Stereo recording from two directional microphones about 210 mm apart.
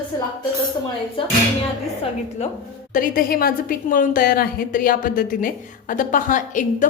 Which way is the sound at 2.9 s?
40° left (ahead or behind).